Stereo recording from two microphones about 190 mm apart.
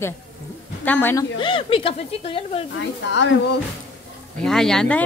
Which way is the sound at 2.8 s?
70° left (ahead or behind).